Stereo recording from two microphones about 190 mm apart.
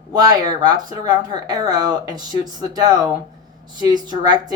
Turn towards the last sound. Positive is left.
turn(degrees=-20)  # may be behind; listen again after turning